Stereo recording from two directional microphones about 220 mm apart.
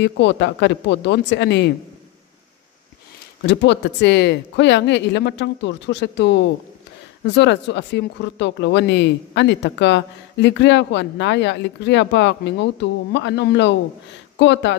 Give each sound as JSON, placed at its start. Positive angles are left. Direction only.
{"t": 0.0, "sound": "speech", "side_deg": 55}
{"t": 3.4, "sound": "speech", "side_deg": 55}